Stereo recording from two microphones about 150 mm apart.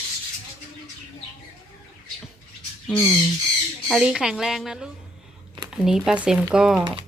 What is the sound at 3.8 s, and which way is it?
A woman's voice, centre (ahead or behind).